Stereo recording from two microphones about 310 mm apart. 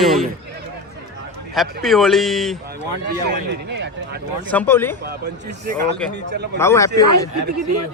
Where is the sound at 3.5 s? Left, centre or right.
Right.